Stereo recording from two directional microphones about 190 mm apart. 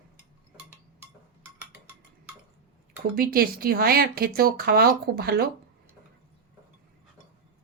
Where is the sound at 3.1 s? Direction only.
50° right (ahead or behind).